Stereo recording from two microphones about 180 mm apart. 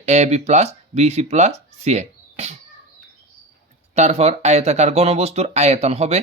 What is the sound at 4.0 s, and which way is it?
Speech, 35° right (ahead or behind).